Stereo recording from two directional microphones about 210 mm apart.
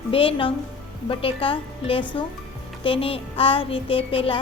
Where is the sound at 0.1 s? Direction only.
25° left (ahead or behind).